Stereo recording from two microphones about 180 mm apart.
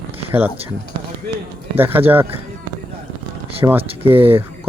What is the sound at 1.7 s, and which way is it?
Speech, 10° right (ahead or behind).